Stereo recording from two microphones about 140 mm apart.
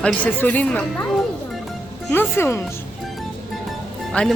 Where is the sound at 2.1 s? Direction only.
15° left (ahead or behind).